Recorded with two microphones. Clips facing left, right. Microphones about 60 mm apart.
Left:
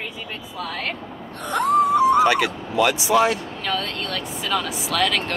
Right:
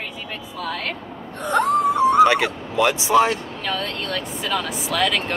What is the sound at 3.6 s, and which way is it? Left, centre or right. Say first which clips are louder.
Speech: even; centre.